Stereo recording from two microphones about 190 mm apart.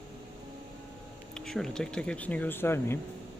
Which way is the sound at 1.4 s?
5° left (ahead or behind).